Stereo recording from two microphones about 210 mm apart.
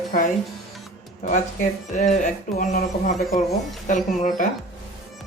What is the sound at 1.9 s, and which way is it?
Speech, 35° left (ahead or behind).